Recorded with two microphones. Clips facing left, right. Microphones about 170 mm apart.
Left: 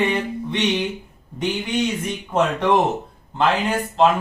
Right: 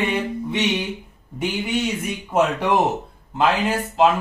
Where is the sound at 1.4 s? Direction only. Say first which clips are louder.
Left 1 dB; 5° right (ahead or behind).